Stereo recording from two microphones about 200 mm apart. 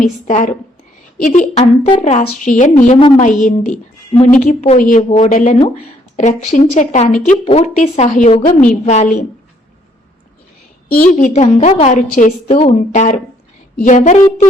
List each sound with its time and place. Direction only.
0.0 s speech: 40° left (ahead or behind)
11.0 s speech: 40° left (ahead or behind)